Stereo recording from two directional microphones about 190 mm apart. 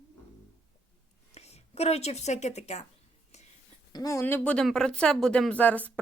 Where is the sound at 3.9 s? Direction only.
20° left (ahead or behind).